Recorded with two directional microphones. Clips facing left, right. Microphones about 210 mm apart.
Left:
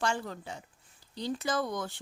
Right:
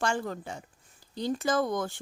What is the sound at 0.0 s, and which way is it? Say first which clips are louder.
A woman's voice: right 3 dB; 50° right (ahead or behind).